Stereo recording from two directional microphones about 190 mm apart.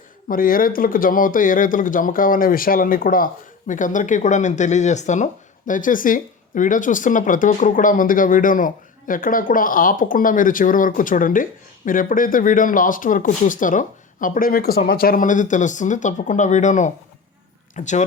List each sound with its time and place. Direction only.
0.3 s speech: 50° left (ahead or behind)